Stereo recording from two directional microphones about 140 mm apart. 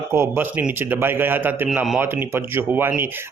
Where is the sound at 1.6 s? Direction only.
Centre (ahead or behind).